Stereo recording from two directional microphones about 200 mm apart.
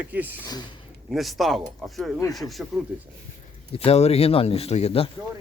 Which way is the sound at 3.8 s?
30° left (ahead or behind).